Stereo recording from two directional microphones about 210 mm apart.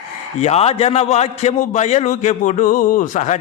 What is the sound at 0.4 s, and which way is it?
A man's voice, 30° left (ahead or behind).